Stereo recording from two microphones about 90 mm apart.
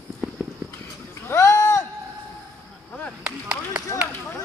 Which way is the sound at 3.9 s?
30° left (ahead or behind).